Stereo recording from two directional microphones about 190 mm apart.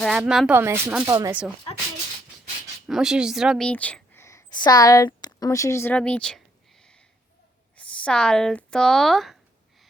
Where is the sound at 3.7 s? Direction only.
5° left (ahead or behind).